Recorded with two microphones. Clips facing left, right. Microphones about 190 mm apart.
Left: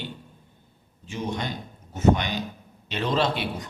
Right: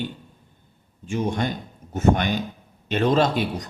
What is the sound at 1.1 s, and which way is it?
A man's voice, 50° right (ahead or behind).